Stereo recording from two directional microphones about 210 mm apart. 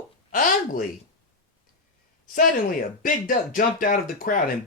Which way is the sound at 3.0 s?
40° left (ahead or behind).